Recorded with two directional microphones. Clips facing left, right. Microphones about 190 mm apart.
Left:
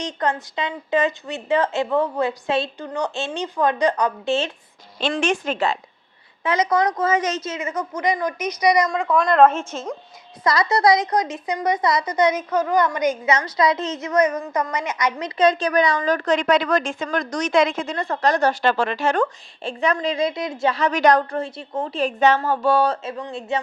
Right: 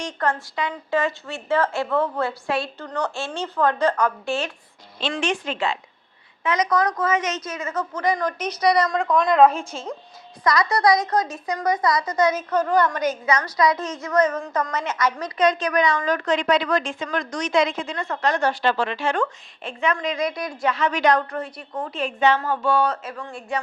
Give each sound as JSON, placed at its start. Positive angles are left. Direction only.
{"t": 0.0, "sound": "a woman's voice", "side_deg": 20}
{"t": 5.1, "sound": "a woman's voice", "side_deg": 45}
{"t": 6.4, "sound": "a woman's voice", "side_deg": 30}
{"t": 10.4, "sound": "a woman's voice", "side_deg": 25}
{"t": 15.4, "sound": "a woman's voice", "side_deg": 30}
{"t": 21.3, "sound": "a woman's voice", "side_deg": 25}